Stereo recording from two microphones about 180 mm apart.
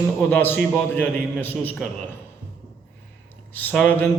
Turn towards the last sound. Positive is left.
turn(degrees=10)  # may be behind; listen again after turning